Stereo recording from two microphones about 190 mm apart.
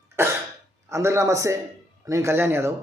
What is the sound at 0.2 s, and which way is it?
Cough, 15° right (ahead or behind).